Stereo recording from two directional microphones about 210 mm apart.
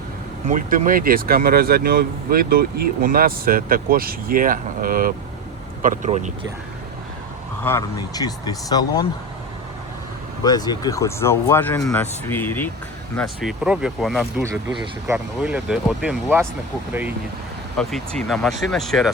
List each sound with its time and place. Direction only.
0.4 s speech: 40° right (ahead or behind)
7.6 s speech: 15° left (ahead or behind)
10.4 s speech: 20° left (ahead or behind)
13.1 s speech: centre (ahead or behind)
14.5 s speech: 15° right (ahead or behind)
17.7 s speech: 5° left (ahead or behind)